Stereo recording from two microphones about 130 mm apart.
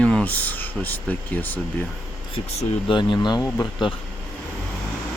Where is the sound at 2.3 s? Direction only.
40° left (ahead or behind).